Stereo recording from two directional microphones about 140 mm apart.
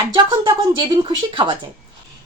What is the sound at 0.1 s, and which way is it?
A woman's voice, 35° right (ahead or behind).